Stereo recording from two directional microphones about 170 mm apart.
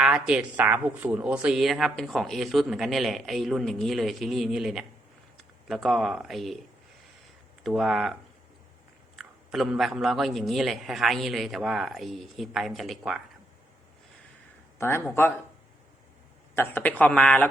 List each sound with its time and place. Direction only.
0.0 s speech: 5° right (ahead or behind)
7.6 s speech: centre (ahead or behind)
14.8 s speech: 15° left (ahead or behind)
16.6 s speech: 10° left (ahead or behind)